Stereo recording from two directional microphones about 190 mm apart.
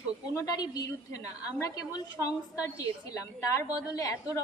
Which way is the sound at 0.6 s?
20° left (ahead or behind).